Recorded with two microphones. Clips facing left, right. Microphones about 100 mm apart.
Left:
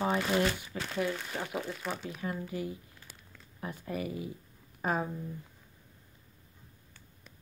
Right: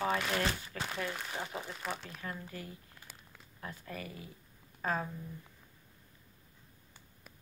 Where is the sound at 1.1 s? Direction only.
10° right (ahead or behind).